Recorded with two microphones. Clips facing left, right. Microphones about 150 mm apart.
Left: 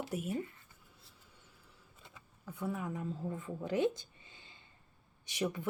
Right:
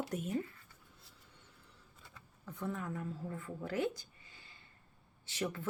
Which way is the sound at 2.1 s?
10° left (ahead or behind).